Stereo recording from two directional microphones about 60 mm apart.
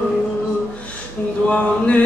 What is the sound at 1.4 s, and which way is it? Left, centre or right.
Mantra, left.